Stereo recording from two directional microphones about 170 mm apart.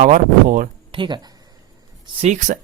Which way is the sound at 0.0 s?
50° right (ahead or behind).